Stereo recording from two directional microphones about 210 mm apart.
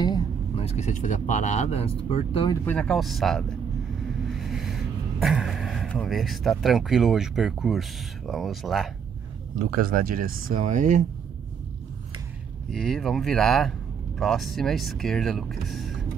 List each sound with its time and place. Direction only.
0.0 s speech: 25° left (ahead or behind)
2.6 s speech: 5° left (ahead or behind)
9.6 s speech: 45° right (ahead or behind)
12.7 s speech: centre (ahead or behind)